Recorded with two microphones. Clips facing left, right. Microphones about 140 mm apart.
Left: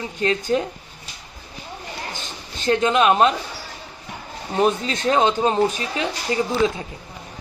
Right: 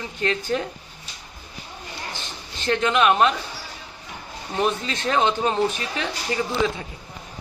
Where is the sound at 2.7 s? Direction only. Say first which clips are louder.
Left 2 dB; 25° left (ahead or behind).